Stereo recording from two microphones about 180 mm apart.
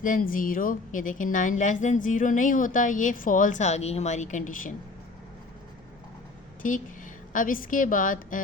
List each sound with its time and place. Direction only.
0.0 s speech: 50° left (ahead or behind)
6.6 s a woman's voice: 45° left (ahead or behind)